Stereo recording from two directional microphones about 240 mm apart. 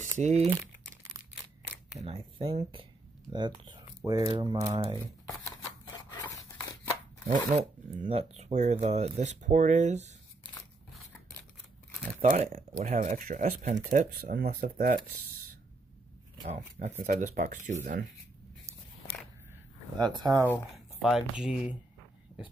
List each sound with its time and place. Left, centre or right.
0.2 s speech: right
2.0 s speech: right
5.4 s scissors: centre
7.5 s speech: right
12.2 s speech: right
16.4 s speech: right
20.2 s speech: centre
20.4 s speech: centre